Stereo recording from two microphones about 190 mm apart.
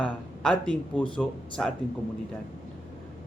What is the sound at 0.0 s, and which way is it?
Speech, 5° left (ahead or behind).